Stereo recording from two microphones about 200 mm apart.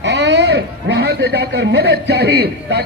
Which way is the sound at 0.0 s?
60° right (ahead or behind).